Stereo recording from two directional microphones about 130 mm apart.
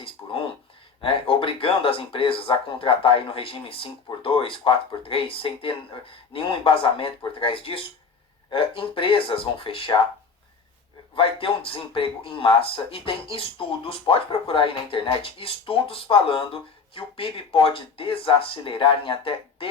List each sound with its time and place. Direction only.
0.0 s a sound: 45° left (ahead or behind)
1.0 s speech: 45° left (ahead or behind)
11.1 s speech: 45° left (ahead or behind)